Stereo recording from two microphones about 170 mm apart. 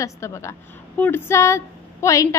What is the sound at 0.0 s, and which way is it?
A woman's voice, 15° left (ahead or behind).